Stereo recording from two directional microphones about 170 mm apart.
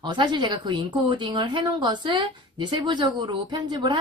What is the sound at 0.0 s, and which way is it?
Speech, 25° right (ahead or behind).